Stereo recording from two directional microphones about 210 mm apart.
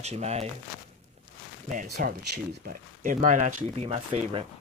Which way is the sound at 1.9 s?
45° right (ahead or behind).